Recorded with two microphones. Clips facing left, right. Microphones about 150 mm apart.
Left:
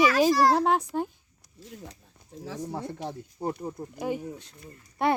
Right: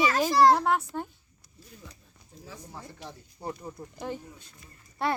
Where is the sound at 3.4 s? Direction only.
40° left (ahead or behind).